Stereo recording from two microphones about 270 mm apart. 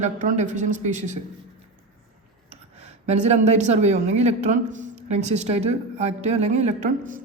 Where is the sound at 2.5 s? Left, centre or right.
Right.